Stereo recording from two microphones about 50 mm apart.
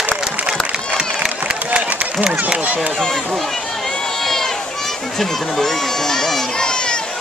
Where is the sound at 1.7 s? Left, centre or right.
Centre.